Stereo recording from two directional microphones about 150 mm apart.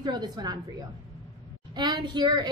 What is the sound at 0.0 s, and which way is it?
Speech, 30° right (ahead or behind).